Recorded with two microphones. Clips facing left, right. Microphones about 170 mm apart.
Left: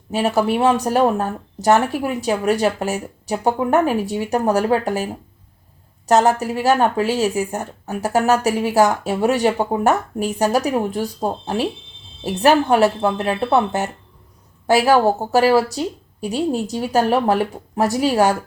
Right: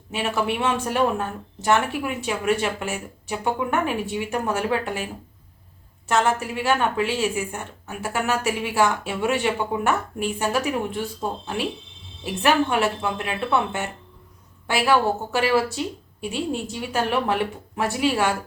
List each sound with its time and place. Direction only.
0.1 s speech: 40° left (ahead or behind)